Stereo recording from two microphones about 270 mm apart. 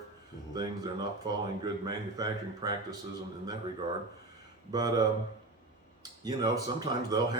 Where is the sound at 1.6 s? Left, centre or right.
Centre.